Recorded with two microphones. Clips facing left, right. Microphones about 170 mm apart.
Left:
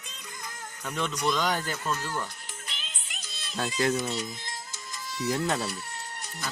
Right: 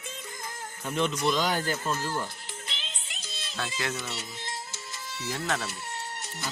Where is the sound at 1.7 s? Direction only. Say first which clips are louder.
Right 1 dB; 30° right (ahead or behind).